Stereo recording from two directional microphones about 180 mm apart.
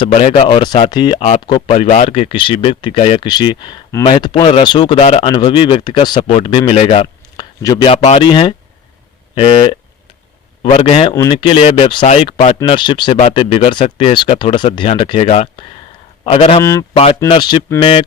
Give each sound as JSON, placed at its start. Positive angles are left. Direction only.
{"t": 0.0, "sound": "a man's voice", "side_deg": 35}
{"t": 7.3, "sound": "a sound", "side_deg": 25}
{"t": 8.0, "sound": "a man's voice", "side_deg": 30}
{"t": 11.1, "sound": "a man's voice", "side_deg": 20}
{"t": 16.6, "sound": "speech", "side_deg": 15}
{"t": 16.9, "sound": "speech", "side_deg": 30}